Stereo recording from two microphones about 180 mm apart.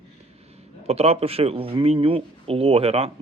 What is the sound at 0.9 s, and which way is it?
Speech, 35° right (ahead or behind).